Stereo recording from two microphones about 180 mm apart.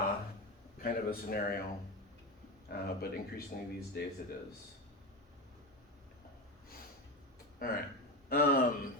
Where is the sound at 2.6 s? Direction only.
60° left (ahead or behind).